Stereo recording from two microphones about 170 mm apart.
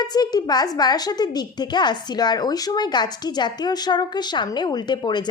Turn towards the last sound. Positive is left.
turn(degrees=25)  # may be behind; listen again after turning